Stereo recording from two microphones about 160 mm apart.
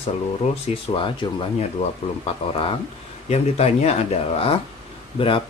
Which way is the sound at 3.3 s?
40° left (ahead or behind).